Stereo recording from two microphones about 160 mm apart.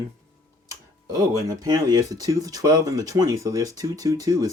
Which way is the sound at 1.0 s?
20° right (ahead or behind).